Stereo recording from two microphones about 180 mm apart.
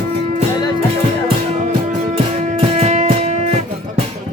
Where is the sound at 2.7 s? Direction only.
40° right (ahead or behind).